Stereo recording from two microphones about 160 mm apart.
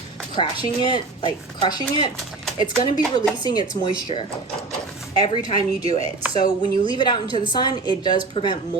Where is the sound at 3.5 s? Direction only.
25° left (ahead or behind).